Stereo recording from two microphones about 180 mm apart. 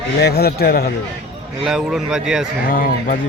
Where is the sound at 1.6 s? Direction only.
Centre (ahead or behind).